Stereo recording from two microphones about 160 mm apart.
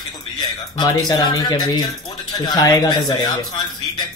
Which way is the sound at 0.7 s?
25° left (ahead or behind).